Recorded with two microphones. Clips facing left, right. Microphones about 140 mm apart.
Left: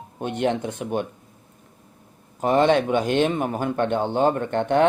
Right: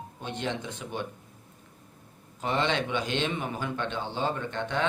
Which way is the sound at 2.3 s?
50° left (ahead or behind).